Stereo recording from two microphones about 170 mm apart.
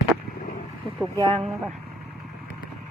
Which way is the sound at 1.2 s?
25° right (ahead or behind).